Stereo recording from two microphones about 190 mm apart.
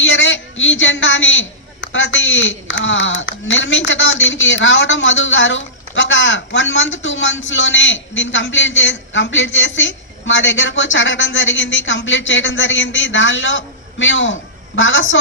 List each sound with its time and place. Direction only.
0.0 s a man's voice: 80° left